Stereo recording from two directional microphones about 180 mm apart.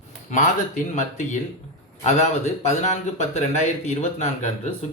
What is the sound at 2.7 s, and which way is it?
Speech, 40° left (ahead or behind).